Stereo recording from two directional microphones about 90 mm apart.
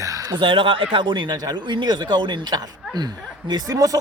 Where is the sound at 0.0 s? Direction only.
40° right (ahead or behind).